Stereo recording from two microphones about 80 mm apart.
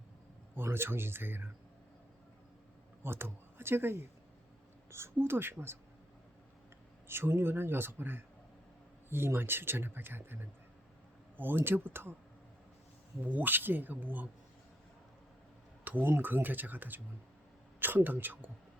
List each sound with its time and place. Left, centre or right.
0.5 s speech: right
3.0 s speech: right
7.1 s speech: right
13.2 s speech: right
15.8 s speech: right